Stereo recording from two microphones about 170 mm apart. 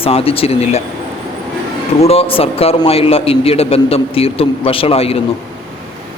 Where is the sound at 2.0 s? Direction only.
35° left (ahead or behind).